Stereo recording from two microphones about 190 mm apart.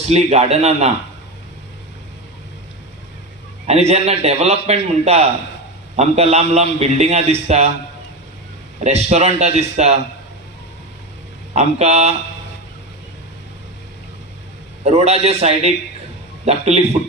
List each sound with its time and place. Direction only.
0.1 s a man's voice: 35° right (ahead or behind)
3.7 s a man's voice: 35° right (ahead or behind)
8.8 s a man's voice: 35° right (ahead or behind)
11.5 s a man's voice: 35° right (ahead or behind)
14.9 s a man's voice: 35° right (ahead or behind)